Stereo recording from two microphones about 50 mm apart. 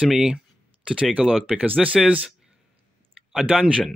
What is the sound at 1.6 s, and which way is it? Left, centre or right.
Speech, right.